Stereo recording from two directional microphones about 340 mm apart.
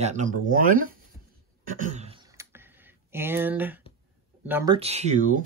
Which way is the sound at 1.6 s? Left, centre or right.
Right.